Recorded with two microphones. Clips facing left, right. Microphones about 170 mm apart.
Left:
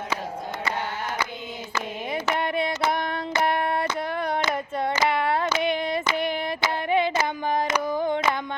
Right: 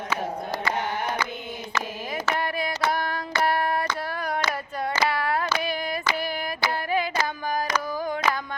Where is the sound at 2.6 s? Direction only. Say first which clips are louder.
Left 2 dB; 25° left (ahead or behind).